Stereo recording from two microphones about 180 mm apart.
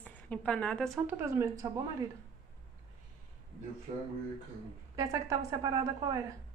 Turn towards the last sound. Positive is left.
turn(degrees=-20)  # may be behind; listen again after turning